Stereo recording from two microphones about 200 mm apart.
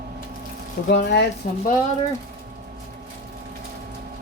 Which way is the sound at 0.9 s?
55° left (ahead or behind).